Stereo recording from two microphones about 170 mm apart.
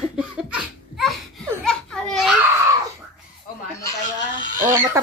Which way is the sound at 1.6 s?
5° left (ahead or behind).